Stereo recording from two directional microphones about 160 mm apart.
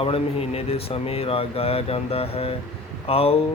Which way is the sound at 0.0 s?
35° left (ahead or behind).